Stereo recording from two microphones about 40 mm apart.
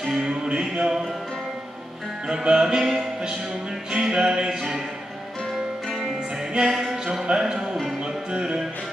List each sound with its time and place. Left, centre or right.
0.1 s music: centre
2.2 s music: right
5.9 s music: centre
7.2 s music: right